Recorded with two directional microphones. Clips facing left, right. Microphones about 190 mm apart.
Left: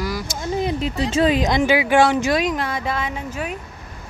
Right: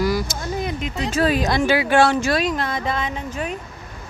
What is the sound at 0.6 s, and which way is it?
Speech, 35° left (ahead or behind).